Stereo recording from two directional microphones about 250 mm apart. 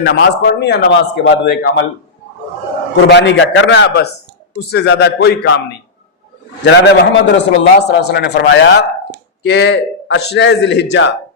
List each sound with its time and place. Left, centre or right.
0.0 s a man's voice: left
3.1 s a man's voice: left
6.7 s a man's voice: left